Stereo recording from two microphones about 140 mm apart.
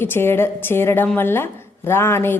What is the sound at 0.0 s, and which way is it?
A woman's voice, 15° left (ahead or behind).